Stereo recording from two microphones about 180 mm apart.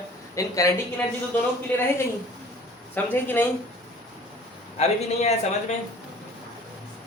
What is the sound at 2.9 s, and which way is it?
Speech, 10° left (ahead or behind).